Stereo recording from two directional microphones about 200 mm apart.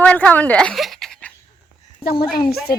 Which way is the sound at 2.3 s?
50° left (ahead or behind).